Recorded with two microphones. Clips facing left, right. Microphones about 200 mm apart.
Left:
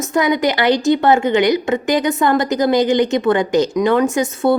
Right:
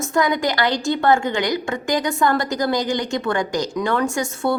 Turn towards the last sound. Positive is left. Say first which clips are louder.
# left 6 dB
turn(degrees=20)  # may be behind; listen again after turning